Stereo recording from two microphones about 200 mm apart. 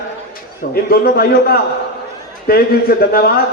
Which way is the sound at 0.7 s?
50° left (ahead or behind).